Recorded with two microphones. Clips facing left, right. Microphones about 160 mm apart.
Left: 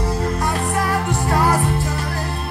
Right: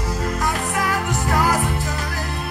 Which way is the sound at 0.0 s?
30° left (ahead or behind).